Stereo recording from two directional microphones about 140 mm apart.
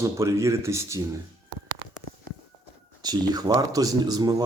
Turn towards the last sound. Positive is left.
turn(degrees=-25)  # may be behind; listen again after turning